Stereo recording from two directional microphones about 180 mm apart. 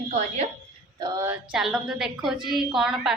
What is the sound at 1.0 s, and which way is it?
Speech, 15° right (ahead or behind).